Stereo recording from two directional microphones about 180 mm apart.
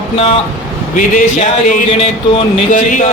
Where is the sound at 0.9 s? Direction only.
45° left (ahead or behind).